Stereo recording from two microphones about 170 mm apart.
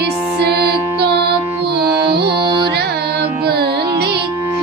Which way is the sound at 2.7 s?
70° right (ahead or behind).